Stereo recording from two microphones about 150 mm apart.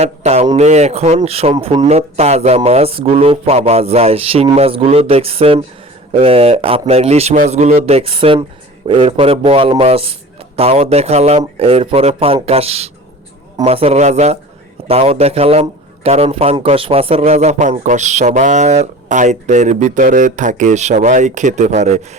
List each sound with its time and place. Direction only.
0.0 s a man's voice: 45° right (ahead or behind)